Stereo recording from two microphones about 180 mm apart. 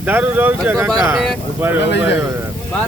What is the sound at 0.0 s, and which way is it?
Speech, 10° right (ahead or behind).